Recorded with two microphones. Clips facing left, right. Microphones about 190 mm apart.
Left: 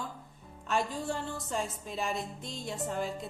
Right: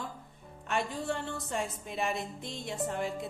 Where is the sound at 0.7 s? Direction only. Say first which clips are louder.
Left 1 dB; 60° right (ahead or behind).